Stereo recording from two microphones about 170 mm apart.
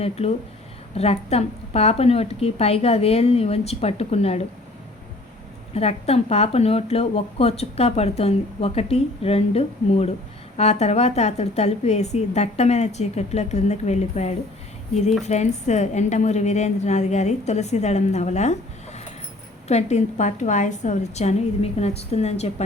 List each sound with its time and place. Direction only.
0.0 s speech: 35° left (ahead or behind)
5.7 s speech: 35° left (ahead or behind)
19.6 s speech: 40° left (ahead or behind)